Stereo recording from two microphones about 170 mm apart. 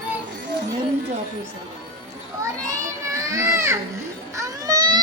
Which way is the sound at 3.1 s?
15° right (ahead or behind).